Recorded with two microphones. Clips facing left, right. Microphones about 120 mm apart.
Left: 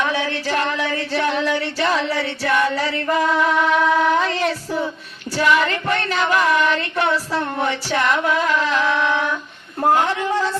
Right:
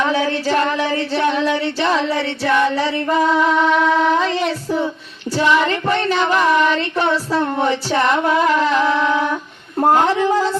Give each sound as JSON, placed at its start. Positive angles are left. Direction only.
{"t": 0.0, "sound": "child singing", "side_deg": -30}
{"t": 9.9, "sound": "a woman's voice", "side_deg": -30}